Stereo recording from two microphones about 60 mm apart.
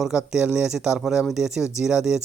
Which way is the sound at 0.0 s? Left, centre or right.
Centre.